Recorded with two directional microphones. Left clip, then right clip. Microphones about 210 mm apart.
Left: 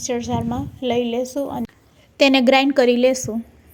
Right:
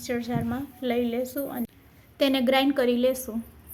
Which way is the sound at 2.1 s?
30° left (ahead or behind).